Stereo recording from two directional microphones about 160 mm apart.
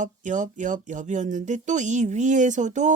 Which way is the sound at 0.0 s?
50° right (ahead or behind).